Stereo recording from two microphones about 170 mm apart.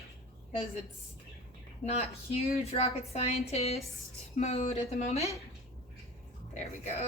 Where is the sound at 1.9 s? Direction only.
40° left (ahead or behind).